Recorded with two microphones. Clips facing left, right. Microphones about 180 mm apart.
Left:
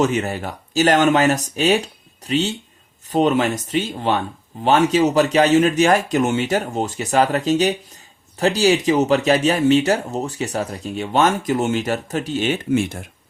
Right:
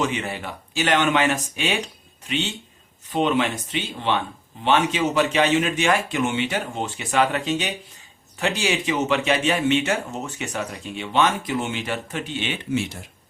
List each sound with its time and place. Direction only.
0.0 s speech: 45° left (ahead or behind)